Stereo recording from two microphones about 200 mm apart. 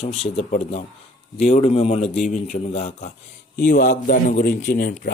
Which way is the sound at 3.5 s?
45° left (ahead or behind).